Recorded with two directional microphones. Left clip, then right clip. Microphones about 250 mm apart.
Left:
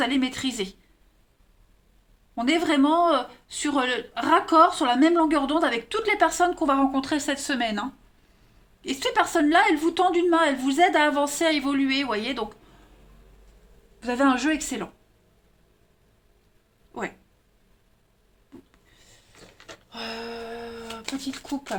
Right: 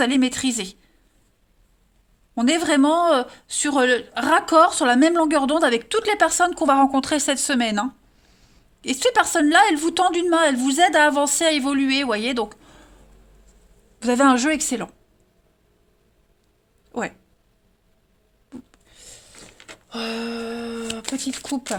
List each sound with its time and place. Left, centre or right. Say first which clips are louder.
0.0 s speech: right 5 dB; right
2.3 s speech: right 3 dB; right
14.0 s speech: right 5 dB; right
16.9 s speech: right 5 dB; right
18.7 s a sound: right 9 dB; right
19.9 s speech: right 6 dB; right